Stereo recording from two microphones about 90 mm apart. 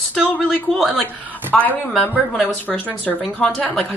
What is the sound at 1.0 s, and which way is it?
A man's voice, 20° left (ahead or behind).